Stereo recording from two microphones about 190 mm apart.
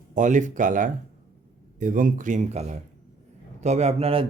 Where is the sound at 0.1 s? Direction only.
40° right (ahead or behind).